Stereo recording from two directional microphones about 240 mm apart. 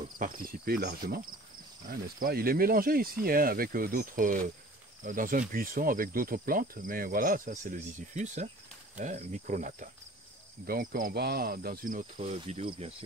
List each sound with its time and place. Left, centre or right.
0.2 s speech: right